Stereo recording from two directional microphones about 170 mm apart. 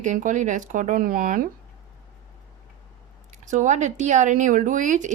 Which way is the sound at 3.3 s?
45° right (ahead or behind).